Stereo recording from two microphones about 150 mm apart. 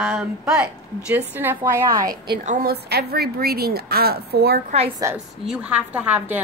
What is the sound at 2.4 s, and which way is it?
A woman's voice, 75° right (ahead or behind).